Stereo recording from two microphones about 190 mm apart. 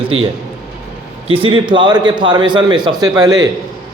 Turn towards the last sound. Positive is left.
turn(degrees=-20)  # may be behind; listen again after turning